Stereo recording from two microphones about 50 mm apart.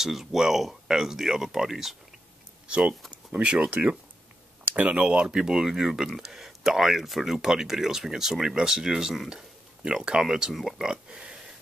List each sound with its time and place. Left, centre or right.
0.0 s speech: centre
3.3 s speech: right; by 9.3 s centre
9.8 s speech: centre